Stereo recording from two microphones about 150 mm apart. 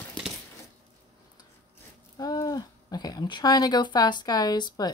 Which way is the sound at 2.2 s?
25° left (ahead or behind).